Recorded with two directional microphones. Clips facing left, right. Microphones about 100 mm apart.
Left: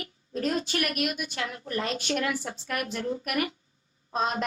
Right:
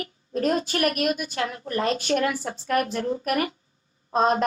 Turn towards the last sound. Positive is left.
turn(degrees=-40)  # may be behind; listen again after turning